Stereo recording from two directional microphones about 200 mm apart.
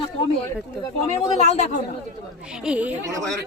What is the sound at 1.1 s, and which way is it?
Speech, 35° left (ahead or behind).